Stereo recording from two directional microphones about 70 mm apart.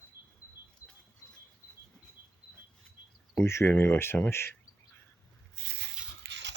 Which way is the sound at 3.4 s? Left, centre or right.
Left.